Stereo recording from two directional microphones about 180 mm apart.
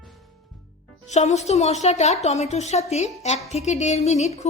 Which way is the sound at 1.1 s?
40° left (ahead or behind).